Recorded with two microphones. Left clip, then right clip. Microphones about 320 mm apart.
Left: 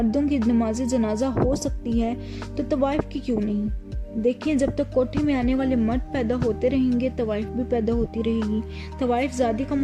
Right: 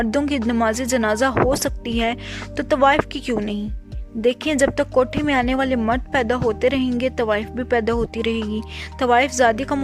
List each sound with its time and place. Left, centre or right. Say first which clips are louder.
0.0 s speech: right 2 dB; right
1.3 s speech: right 5 dB; right
1.5 s speech: right 4 dB; right